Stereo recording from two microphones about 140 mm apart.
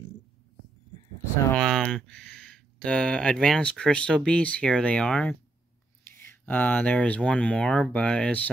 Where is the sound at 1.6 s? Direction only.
5° left (ahead or behind).